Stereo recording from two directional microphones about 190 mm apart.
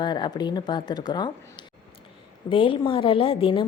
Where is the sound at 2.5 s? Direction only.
25° left (ahead or behind).